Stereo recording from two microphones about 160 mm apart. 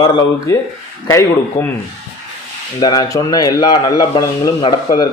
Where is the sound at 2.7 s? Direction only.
25° left (ahead or behind).